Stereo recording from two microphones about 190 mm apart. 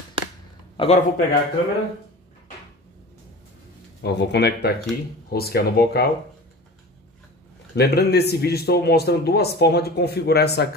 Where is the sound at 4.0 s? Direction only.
60° left (ahead or behind).